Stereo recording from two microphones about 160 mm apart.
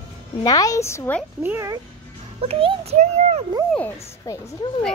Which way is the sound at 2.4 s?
35° right (ahead or behind).